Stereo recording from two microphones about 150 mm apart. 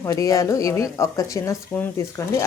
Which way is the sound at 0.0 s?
20° left (ahead or behind).